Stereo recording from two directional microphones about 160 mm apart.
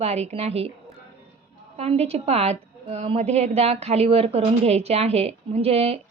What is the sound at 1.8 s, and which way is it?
A woman's voice, 40° right (ahead or behind).